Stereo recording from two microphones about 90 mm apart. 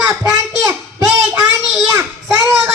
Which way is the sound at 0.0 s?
35° right (ahead or behind).